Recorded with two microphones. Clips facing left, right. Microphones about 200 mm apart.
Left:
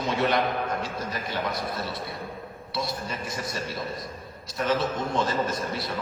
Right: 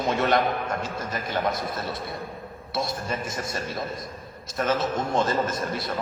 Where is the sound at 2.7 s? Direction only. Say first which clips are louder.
Right 3 dB; 50° right (ahead or behind).